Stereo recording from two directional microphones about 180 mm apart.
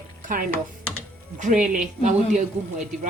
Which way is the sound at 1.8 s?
45° right (ahead or behind).